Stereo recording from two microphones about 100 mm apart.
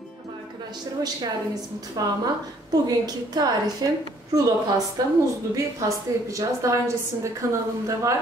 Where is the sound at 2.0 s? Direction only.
40° right (ahead or behind).